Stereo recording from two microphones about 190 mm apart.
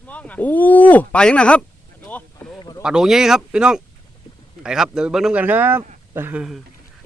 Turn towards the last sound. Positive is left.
turn(degrees=-5)  # may be behind; listen again after turning